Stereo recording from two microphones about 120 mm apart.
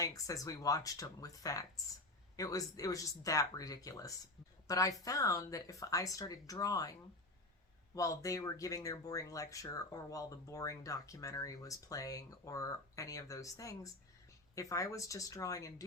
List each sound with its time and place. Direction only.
0.0 s speech: 30° left (ahead or behind)
7.9 s speech: 25° left (ahead or behind)